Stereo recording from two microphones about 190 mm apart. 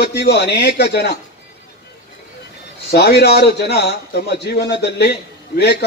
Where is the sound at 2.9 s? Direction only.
60° left (ahead or behind).